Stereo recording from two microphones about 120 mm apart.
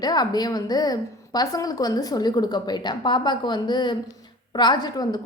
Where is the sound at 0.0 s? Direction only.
35° left (ahead or behind).